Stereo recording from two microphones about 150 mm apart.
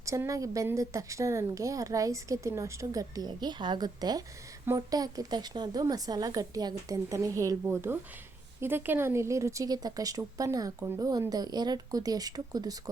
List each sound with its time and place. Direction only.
0.0 s speech: 20° right (ahead or behind)